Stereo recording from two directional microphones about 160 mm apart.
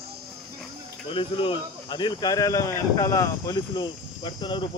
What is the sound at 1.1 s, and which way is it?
Speech, 35° left (ahead or behind).